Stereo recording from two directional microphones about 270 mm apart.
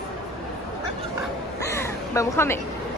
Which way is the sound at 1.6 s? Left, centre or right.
Centre.